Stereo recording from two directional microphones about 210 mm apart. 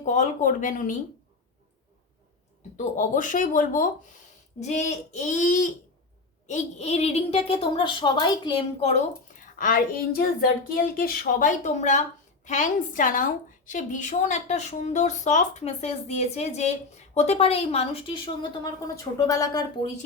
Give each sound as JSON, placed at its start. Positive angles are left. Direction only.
{"t": 0.0, "sound": "a woman's voice", "side_deg": 35}
{"t": 2.7, "sound": "a woman's voice", "side_deg": 40}
{"t": 9.4, "sound": "a woman's voice", "side_deg": 40}